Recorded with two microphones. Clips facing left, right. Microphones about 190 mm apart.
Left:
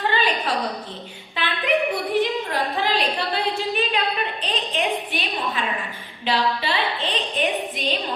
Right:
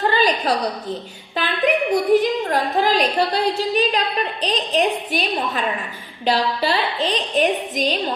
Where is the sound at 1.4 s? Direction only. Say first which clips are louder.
Right 3 dB; 40° right (ahead or behind).